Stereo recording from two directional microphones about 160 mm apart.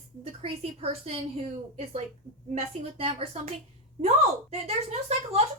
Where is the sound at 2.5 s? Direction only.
40° right (ahead or behind).